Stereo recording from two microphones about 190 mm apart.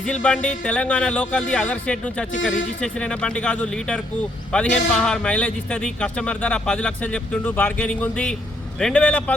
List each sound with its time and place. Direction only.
0.0 s speech: 5° left (ahead or behind)
2.3 s speech: 85° left
2.8 s a man's voice: 5° left (ahead or behind)